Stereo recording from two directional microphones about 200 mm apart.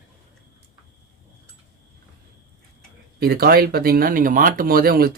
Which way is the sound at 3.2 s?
50° right (ahead or behind).